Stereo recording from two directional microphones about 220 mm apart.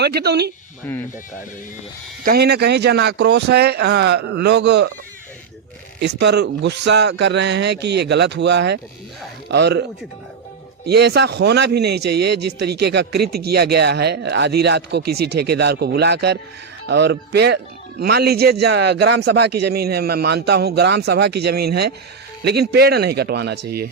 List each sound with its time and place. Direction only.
0.0 s a man's voice: 50° right (ahead or behind)
2.2 s a man's voice: 45° right (ahead or behind)
6.0 s a man's voice: 50° right (ahead or behind)
10.8 s a man's voice: 45° right (ahead or behind)